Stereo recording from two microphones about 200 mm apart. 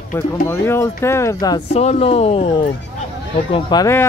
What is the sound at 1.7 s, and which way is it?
Speech, 30° left (ahead or behind).